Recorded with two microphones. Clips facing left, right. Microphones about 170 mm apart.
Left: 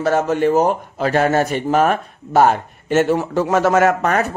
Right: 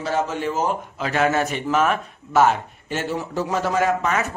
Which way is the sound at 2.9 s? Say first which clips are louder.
Left 9 dB; 70° left (ahead or behind).